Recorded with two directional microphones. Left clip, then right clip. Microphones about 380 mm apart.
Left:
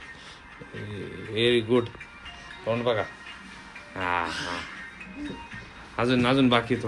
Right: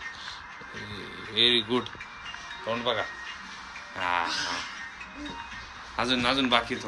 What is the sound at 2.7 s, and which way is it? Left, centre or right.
Speech, centre.